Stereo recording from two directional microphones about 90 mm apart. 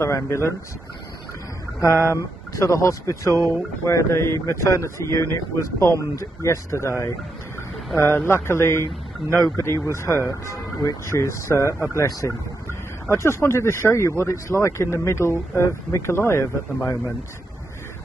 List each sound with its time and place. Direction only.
0.0 s a man's voice: 30° left (ahead or behind)
1.8 s a man's voice: 35° left (ahead or behind)
8.0 s a man's voice: 25° left (ahead or behind)